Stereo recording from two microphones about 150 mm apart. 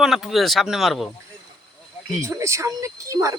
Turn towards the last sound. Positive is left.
turn(degrees=-20)  # may be behind; listen again after turning